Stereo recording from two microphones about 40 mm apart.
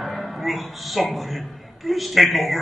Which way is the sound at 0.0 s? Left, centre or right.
Centre.